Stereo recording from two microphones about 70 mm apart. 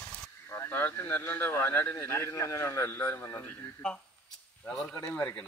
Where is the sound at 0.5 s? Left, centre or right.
Left.